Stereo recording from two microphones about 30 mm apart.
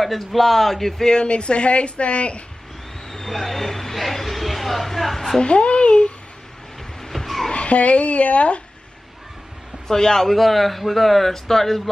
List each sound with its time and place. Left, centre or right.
0.0 s a man's voice: centre
1.0 s speech: left
3.1 s vehicle: centre
4.0 s a sound: centre
5.4 s a child's voice: left
7.0 s vehicle: centre
7.5 s speech: left
9.8 s a man's voice: centre
10.2 s a man's voice: centre